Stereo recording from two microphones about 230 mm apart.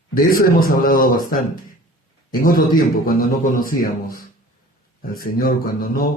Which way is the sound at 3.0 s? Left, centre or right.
Left.